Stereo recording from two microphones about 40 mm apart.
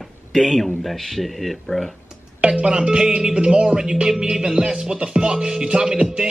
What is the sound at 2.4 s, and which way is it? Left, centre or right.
Speech, right.